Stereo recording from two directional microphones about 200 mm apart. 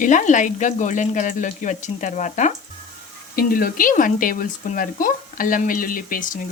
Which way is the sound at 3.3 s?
45° left (ahead or behind).